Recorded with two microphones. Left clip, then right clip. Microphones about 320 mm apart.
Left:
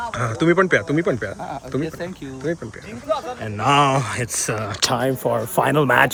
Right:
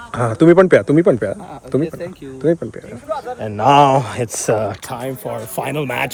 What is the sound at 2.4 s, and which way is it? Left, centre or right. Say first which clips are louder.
Speech: right 9 dB; centre.